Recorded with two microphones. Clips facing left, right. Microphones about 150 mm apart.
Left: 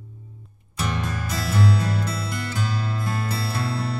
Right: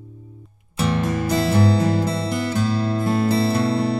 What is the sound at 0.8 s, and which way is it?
Music, 30° right (ahead or behind).